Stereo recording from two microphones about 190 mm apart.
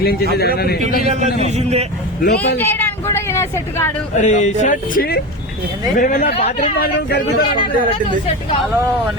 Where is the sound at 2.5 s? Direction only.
10° left (ahead or behind).